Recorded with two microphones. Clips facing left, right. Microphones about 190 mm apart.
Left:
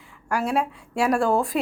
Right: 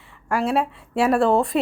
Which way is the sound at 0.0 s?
Centre (ahead or behind).